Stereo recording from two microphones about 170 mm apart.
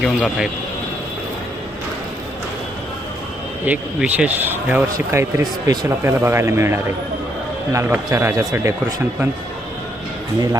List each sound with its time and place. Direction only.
0.0 s speech: 5° right (ahead or behind)
3.7 s speech: 10° right (ahead or behind)